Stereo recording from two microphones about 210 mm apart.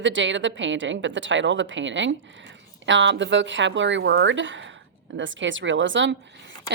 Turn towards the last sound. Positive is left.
turn(degrees=-60)  # may be behind; listen again after turning